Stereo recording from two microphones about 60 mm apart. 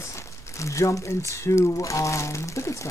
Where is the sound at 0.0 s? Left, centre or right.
Left.